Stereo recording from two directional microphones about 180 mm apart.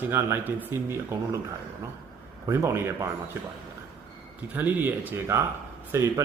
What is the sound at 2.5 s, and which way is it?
Speech, 15° right (ahead or behind).